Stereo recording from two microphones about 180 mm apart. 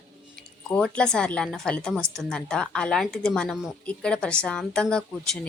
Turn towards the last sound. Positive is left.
turn(degrees=5)  # may be behind; listen again after turning